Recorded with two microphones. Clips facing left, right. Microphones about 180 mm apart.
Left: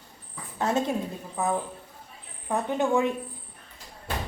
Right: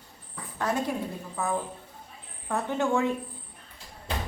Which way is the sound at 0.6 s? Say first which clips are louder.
Left 3 dB; 25° left (ahead or behind).